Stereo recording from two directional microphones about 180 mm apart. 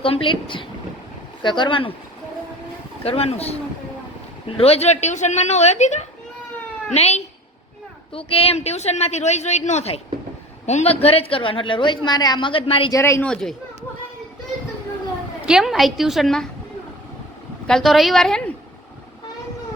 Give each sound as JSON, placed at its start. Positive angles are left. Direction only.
{"t": 0.0, "sound": "a woman's voice", "side_deg": 30}
{"t": 3.0, "sound": "a woman's voice", "side_deg": 35}
{"t": 12.9, "sound": "speech", "side_deg": 15}
{"t": 13.3, "sound": "a woman's voice", "side_deg": 5}
{"t": 15.4, "sound": "a woman's voice", "side_deg": 0}
{"t": 17.7, "sound": "a woman's voice", "side_deg": 0}